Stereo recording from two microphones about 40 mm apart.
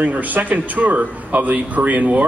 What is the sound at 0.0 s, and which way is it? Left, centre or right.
A man's voice, right.